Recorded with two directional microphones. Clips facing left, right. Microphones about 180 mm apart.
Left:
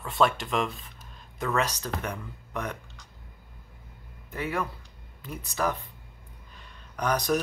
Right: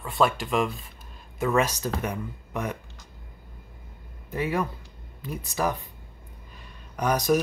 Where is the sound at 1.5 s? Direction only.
15° right (ahead or behind).